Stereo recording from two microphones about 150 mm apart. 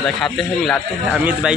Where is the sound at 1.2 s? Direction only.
10° right (ahead or behind).